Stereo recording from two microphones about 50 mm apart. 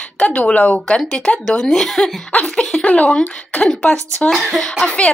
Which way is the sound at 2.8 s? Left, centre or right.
Left.